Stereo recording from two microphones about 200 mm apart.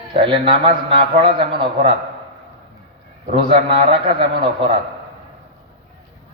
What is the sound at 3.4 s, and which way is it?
Mantra, 25° right (ahead or behind).